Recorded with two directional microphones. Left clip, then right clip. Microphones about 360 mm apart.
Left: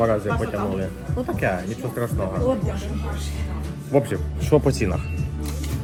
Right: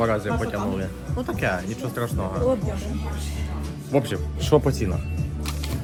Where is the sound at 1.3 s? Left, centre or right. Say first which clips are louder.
Left 1 dB; centre.